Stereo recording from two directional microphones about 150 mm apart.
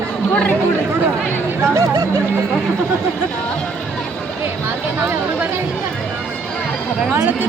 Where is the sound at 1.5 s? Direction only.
15° right (ahead or behind).